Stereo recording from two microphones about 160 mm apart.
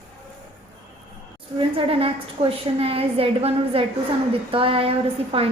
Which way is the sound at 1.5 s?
35° right (ahead or behind).